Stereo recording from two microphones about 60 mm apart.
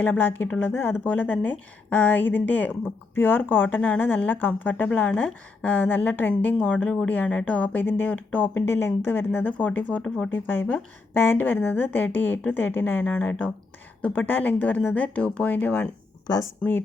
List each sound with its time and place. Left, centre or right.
0.0 s a woman's voice: left
10.3 s a woman's voice: left
13.1 s speech: left
16.6 s speech: centre